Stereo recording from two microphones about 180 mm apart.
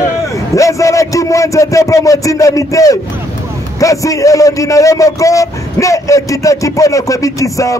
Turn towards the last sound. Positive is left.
turn(degrees=20)  # may be behind; listen again after turning